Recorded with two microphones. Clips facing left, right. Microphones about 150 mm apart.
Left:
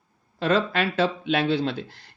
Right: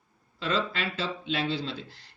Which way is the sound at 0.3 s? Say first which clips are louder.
Left 7 dB; 55° left (ahead or behind).